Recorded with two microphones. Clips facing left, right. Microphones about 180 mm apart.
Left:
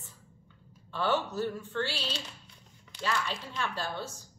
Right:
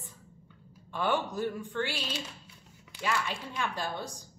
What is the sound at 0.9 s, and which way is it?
A woman's voice, 15° right (ahead or behind).